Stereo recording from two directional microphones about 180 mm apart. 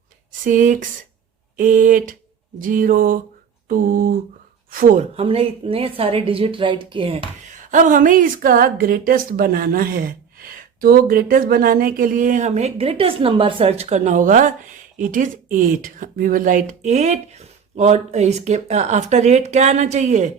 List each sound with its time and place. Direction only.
0.4 s speech: 45° right (ahead or behind)
5.1 s a woman's voice: 30° right (ahead or behind)
7.5 s speech: 45° right (ahead or behind)